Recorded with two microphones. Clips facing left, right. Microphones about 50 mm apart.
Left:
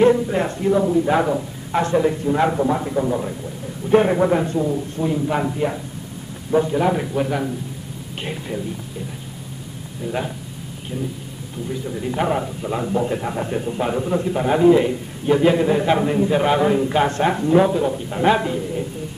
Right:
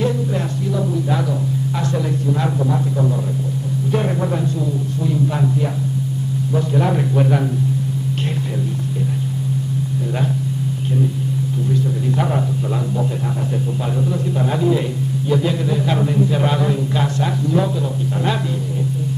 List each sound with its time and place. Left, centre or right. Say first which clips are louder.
0.0 s a man's voice: left 5 dB; left
3.9 s a man's voice: left 7 dB; left
6.7 s a man's voice: right 1 dB; centre
11.7 s speech: right 3 dB; centre
12.9 s a man's voice: left 1 dB; left